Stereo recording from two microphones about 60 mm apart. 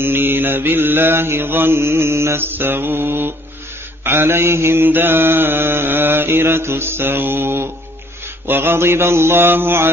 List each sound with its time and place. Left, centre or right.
0.0 s mantra: right